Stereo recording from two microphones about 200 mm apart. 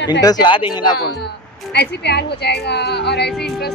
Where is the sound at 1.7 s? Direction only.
55° left (ahead or behind).